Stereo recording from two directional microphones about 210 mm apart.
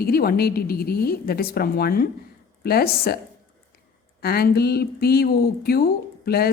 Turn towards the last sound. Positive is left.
turn(degrees=45)  # may be behind; listen again after turning